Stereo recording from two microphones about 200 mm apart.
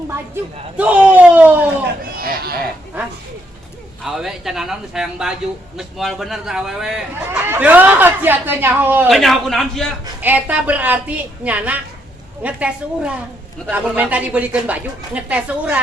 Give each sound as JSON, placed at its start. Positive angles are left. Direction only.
{"t": 0.8, "sound": "a man's voice", "side_deg": -5}
{"t": 2.1, "sound": "speech", "side_deg": -50}
{"t": 4.0, "sound": "a man's voice", "side_deg": 0}